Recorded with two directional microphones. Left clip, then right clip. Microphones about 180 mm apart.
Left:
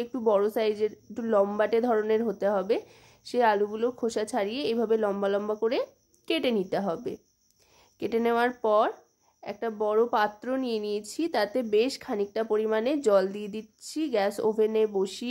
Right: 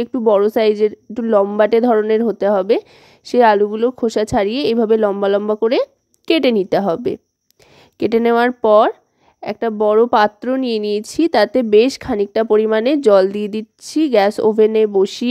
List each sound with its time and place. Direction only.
0.0 s a woman's voice: 35° right (ahead or behind)